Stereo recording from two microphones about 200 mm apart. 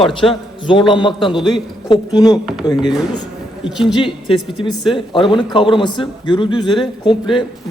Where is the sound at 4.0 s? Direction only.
25° left (ahead or behind).